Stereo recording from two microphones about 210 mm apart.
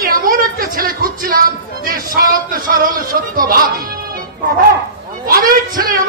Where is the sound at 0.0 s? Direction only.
45° right (ahead or behind).